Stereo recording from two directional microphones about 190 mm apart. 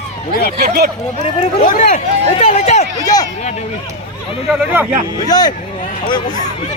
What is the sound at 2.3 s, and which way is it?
Speech, 30° left (ahead or behind).